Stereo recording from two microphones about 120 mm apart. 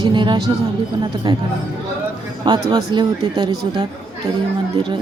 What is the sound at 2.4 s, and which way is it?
Speech, 35° right (ahead or behind).